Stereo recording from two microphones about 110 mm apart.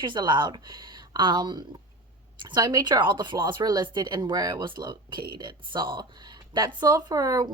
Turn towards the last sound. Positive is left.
turn(degrees=-35)  # may be behind; listen again after turning